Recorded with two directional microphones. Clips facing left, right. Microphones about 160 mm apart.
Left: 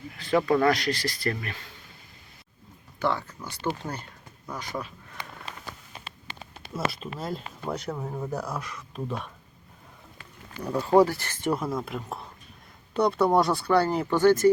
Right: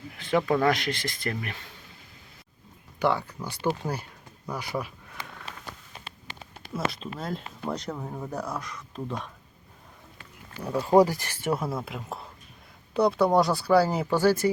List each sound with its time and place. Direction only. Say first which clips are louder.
0.2 s speech: left 1 dB; 20° right (ahead or behind)
0.4 s speech: left 2 dB; 5° right (ahead or behind)
0.7 s speech: left 2 dB; 20° right (ahead or behind)
3.0 s speech: right 2 dB; 15° right (ahead or behind)
6.7 s speech: even; 5° left (ahead or behind)
10.6 s speech: even; 5° right (ahead or behind)